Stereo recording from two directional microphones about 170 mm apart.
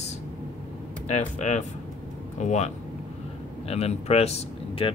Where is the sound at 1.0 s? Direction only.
45° left (ahead or behind).